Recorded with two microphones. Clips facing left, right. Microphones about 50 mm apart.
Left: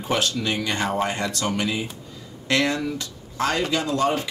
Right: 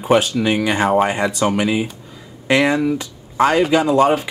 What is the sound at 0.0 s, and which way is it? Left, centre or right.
Speech, centre.